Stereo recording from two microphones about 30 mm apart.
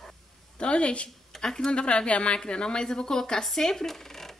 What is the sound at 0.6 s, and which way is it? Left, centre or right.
Speech, left.